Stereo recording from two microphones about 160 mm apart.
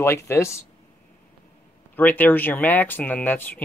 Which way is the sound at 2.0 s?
10° left (ahead or behind).